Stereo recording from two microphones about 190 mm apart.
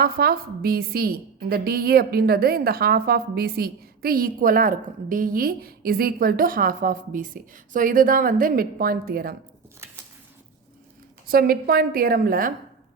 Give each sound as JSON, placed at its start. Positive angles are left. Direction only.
{"t": 0.0, "sound": "a woman's voice", "side_deg": -55}
{"t": 9.8, "sound": "a sound", "side_deg": -15}
{"t": 11.3, "sound": "a woman's voice", "side_deg": -50}